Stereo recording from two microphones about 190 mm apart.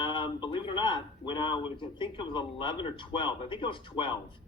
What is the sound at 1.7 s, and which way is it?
A man's voice, 25° left (ahead or behind).